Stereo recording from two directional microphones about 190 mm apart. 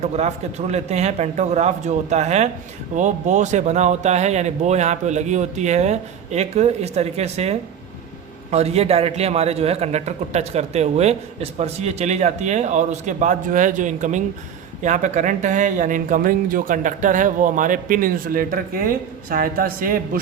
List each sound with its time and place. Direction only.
0.0 s a man's voice: 35° right (ahead or behind)